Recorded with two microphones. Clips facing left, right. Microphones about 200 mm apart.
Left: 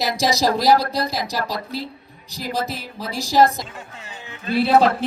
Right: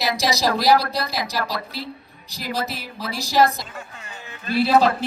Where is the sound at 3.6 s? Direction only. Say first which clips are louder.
Left 2 dB; 20° left (ahead or behind).